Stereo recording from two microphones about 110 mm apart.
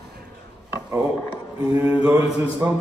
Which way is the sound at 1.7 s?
25° right (ahead or behind).